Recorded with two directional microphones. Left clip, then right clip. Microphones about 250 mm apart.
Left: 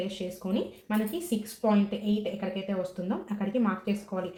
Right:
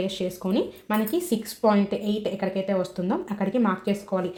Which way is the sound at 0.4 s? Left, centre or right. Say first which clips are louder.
Right 6 dB; right.